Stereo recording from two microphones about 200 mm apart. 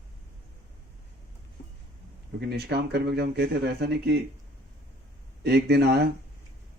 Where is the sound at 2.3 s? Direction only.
55° right (ahead or behind).